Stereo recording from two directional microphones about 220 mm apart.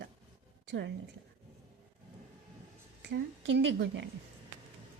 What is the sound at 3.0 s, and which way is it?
A woman's voice, 50° right (ahead or behind).